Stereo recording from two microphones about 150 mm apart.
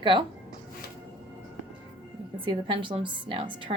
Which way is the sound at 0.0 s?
35° right (ahead or behind).